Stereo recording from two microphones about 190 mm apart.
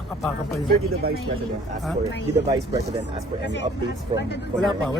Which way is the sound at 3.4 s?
65° left (ahead or behind).